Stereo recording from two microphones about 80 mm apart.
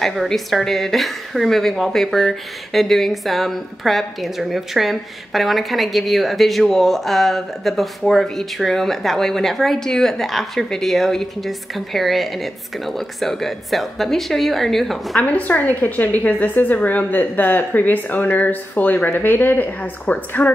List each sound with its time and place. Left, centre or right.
0.0 s a woman's voice: centre
15.2 s a woman's voice: centre